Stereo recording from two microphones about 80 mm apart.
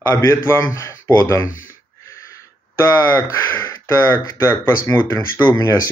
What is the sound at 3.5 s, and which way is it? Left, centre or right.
Speech, left.